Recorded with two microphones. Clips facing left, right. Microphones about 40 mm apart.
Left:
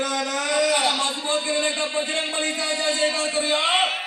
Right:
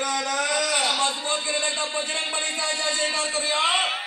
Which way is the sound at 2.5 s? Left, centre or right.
Centre.